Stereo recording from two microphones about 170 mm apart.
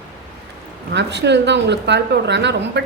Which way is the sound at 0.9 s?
90° right.